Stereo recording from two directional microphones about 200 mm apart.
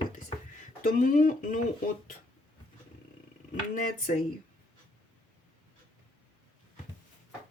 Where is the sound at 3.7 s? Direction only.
45° left (ahead or behind).